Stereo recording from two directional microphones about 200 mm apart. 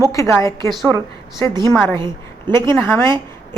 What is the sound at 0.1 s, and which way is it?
Speech, 15° left (ahead or behind).